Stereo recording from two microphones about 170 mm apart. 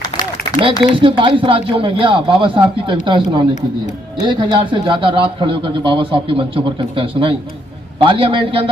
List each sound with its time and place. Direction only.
0.8 s a man's voice: 30° right (ahead or behind)